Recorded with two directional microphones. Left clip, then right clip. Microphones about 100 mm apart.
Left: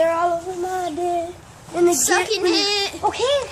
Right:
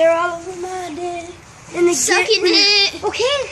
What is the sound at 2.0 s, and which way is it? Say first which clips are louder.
Speech: right 4 dB; 20° left (ahead or behind).